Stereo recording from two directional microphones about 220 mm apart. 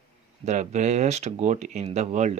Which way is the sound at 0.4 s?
30° right (ahead or behind).